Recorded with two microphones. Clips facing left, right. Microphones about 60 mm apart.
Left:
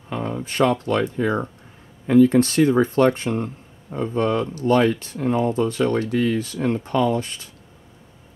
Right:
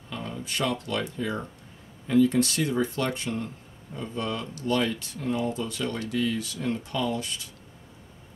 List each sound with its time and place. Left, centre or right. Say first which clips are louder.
0.1 s speech: left 7 dB; left